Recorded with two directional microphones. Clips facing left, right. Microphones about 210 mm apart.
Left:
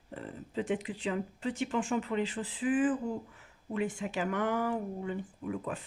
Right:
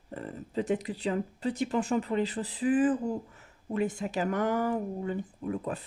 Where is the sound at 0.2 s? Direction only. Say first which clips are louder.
Right 3 dB; 40° right (ahead or behind).